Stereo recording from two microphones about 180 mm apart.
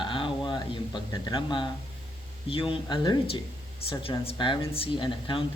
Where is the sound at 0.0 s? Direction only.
25° left (ahead or behind).